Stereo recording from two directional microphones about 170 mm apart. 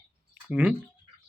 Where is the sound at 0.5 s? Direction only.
5° right (ahead or behind).